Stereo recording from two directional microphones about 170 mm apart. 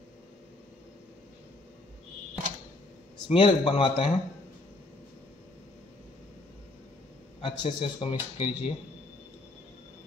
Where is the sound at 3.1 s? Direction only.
30° left (ahead or behind).